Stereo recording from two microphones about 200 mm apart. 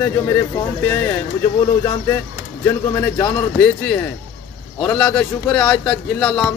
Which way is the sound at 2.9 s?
10° left (ahead or behind).